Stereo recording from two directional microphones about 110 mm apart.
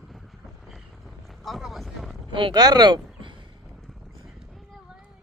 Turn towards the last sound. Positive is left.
turn(degrees=-45)  # may be behind; listen again after turning